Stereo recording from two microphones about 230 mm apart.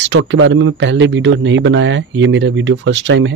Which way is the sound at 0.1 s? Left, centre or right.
Right.